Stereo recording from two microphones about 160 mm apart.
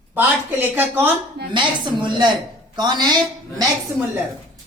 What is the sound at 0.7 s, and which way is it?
Speech, 10° right (ahead or behind).